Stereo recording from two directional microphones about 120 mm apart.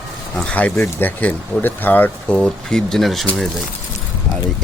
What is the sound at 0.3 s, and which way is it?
Speech, 10° left (ahead or behind).